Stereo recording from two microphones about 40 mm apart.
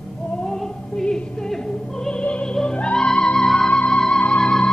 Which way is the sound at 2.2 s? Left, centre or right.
Left.